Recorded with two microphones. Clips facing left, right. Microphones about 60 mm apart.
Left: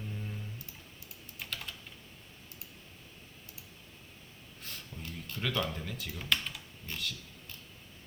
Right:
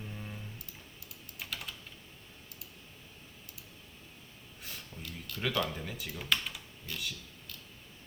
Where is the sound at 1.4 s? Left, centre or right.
Centre.